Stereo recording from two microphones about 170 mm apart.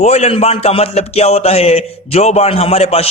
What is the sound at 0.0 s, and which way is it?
A man's voice, 40° left (ahead or behind).